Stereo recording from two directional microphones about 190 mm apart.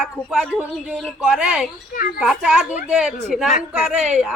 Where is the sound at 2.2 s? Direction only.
5° right (ahead or behind).